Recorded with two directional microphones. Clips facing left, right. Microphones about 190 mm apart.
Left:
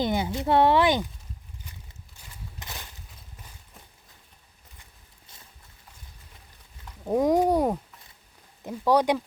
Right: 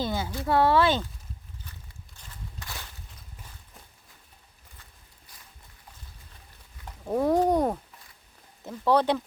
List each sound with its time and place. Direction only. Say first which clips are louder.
0.0 s speech: left 4 dB; 20° left (ahead or behind)
2.6 s a sound: even; 20° left (ahead or behind)
7.1 s speech: left 1 dB; 15° left (ahead or behind)